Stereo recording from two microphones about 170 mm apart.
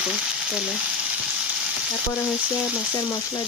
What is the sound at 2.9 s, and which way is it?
Frying, 25° left (ahead or behind).